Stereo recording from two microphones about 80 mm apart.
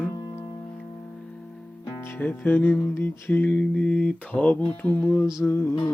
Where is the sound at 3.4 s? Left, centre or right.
Centre.